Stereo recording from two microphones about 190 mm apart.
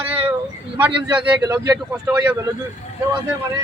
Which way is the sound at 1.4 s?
20° right (ahead or behind).